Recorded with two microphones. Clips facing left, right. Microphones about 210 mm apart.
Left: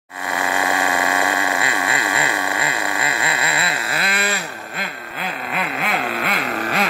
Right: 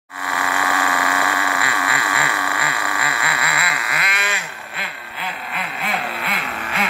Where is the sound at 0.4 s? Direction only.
20° left (ahead or behind).